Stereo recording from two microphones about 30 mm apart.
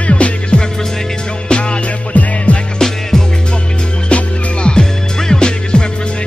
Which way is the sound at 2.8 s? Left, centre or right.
Centre.